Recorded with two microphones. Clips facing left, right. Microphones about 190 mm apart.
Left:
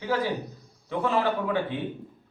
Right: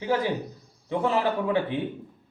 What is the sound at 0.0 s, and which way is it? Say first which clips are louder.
A man's voice: right 2 dB; 15° right (ahead or behind).